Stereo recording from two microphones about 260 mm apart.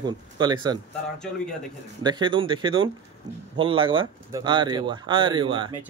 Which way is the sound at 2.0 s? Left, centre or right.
Centre.